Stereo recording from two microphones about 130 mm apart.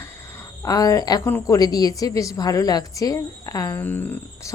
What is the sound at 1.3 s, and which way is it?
Speech, 15° left (ahead or behind).